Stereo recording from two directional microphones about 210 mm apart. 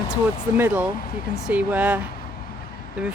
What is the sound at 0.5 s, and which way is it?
Speech, 10° right (ahead or behind).